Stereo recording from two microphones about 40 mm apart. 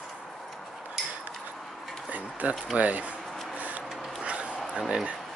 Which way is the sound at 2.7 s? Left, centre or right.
Right.